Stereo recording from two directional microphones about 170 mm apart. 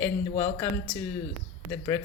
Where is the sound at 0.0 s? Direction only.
10° left (ahead or behind).